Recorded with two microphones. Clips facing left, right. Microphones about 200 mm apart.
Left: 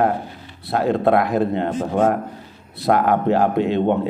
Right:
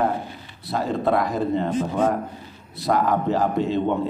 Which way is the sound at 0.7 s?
60° left (ahead or behind).